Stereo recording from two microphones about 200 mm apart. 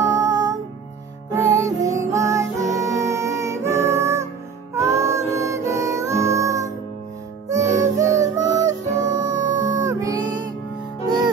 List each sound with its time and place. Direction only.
0.0 s music: 15° right (ahead or behind)